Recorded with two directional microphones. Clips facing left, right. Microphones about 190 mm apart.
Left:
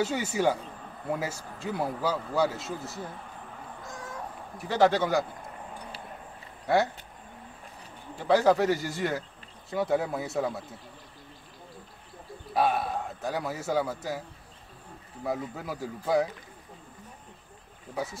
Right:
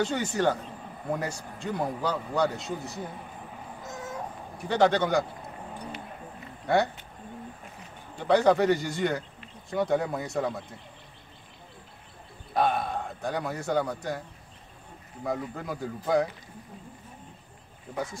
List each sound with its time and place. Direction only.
0.0 s a man's voice: 5° left (ahead or behind)
3.8 s a sound: 20° right (ahead or behind)
4.6 s a man's voice: centre (ahead or behind)
6.6 s speech: centre (ahead or behind)
8.2 s a man's voice: 5° left (ahead or behind)
12.5 s a man's voice: 5° left (ahead or behind)
15.2 s a man's voice: 5° left (ahead or behind)